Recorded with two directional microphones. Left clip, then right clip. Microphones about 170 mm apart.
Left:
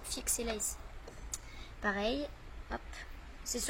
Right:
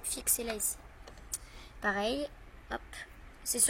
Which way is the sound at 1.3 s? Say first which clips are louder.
Right 2 dB; 35° right (ahead or behind).